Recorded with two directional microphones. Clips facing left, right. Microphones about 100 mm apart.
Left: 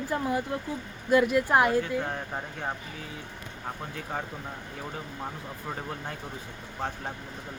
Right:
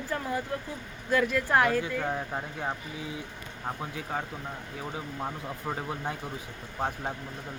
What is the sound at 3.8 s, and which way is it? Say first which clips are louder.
Speech: even; 5° right (ahead or behind).